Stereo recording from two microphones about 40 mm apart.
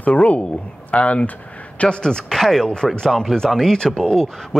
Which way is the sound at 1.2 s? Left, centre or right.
Left.